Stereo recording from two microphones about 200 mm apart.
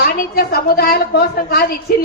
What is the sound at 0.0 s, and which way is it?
Speech, 50° left (ahead or behind).